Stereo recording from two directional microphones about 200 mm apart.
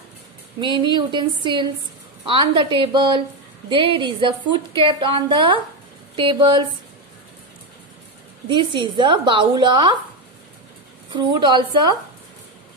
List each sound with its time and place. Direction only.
0.6 s a woman's voice: 25° right (ahead or behind)
8.5 s a woman's voice: 25° right (ahead or behind)
11.1 s a woman's voice: 20° right (ahead or behind)